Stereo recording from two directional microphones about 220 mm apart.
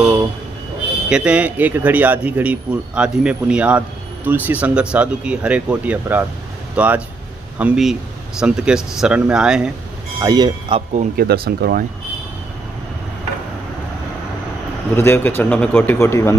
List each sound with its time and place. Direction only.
1.0 s speech: 5° right (ahead or behind)
10.2 s speech: 20° right (ahead or behind)
10.9 s speech: 35° right (ahead or behind)
11.2 s speech: 45° right (ahead or behind)
15.0 s a man's voice: 10° left (ahead or behind)